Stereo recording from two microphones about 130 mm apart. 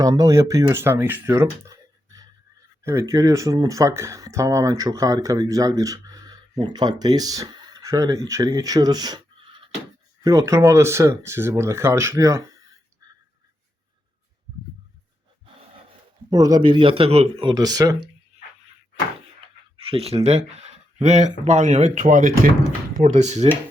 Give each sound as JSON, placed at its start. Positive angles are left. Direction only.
{"t": 0.0, "sound": "speech", "side_deg": -30}
{"t": 10.2, "sound": "speech", "side_deg": -25}
{"t": 16.3, "sound": "speech", "side_deg": -30}
{"t": 16.7, "sound": "a man's voice", "side_deg": -45}
{"t": 17.5, "sound": "speech", "side_deg": -30}
{"t": 19.7, "sound": "speech", "side_deg": -45}
{"t": 23.0, "sound": "speech", "side_deg": -65}